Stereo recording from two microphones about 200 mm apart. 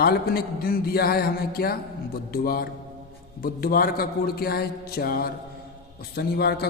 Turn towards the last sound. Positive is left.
turn(degrees=55)  # may be behind; listen again after turning